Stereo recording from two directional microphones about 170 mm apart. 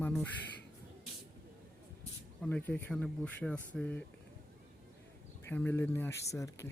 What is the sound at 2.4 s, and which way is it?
Speech, 10° left (ahead or behind).